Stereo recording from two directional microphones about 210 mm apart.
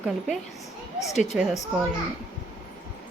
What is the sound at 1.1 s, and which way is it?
Speech, 30° left (ahead or behind).